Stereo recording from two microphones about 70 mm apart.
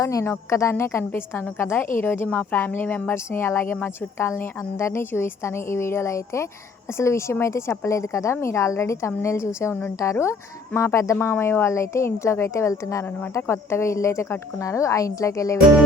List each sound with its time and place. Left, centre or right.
0.0 s a woman's voice: left
4.3 s a woman's voice: left